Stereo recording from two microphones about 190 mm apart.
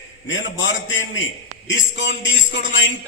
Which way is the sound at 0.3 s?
80° left.